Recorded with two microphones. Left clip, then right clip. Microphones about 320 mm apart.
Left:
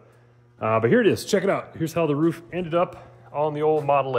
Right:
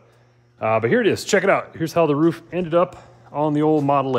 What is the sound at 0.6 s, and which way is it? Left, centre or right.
A man's voice, centre.